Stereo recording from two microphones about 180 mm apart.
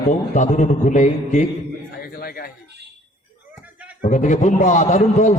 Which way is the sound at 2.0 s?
55° left (ahead or behind).